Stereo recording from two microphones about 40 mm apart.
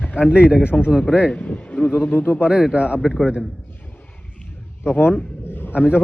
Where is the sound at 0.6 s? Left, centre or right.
Left.